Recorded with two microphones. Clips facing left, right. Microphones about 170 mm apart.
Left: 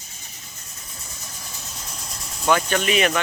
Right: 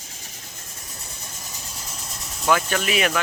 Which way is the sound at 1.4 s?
5° right (ahead or behind).